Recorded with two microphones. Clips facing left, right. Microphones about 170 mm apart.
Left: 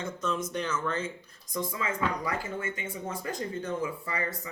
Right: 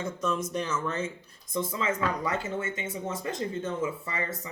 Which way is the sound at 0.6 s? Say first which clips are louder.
Right 1 dB; 30° right (ahead or behind).